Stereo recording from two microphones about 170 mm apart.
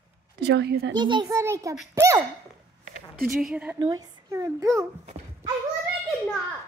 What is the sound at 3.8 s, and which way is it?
A child's voice, 20° right (ahead or behind).